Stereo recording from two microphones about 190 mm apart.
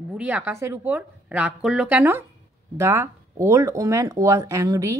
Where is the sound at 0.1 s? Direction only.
5° right (ahead or behind).